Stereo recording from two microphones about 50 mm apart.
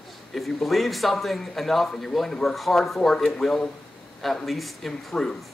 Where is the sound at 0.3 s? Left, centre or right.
Centre.